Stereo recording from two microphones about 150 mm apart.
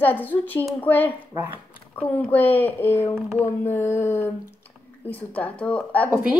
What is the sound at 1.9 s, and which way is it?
A woman's voice, 10° left (ahead or behind).